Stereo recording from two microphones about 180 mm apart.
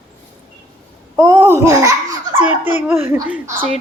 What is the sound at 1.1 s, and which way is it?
Laughter, 20° right (ahead or behind).